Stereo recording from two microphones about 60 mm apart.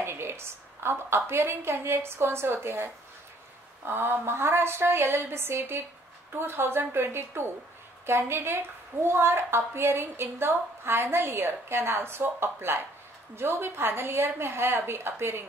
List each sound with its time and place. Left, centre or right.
0.0 s a woman's voice: right